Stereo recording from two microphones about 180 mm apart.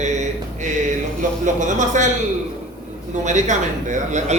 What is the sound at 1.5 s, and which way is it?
Speech, 45° right (ahead or behind).